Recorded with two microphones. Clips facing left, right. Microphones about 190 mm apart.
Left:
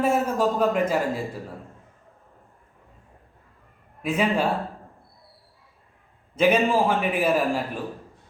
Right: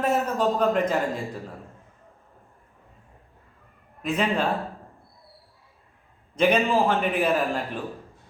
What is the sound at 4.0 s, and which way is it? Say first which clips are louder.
Speech: left 2 dB; 10° left (ahead or behind).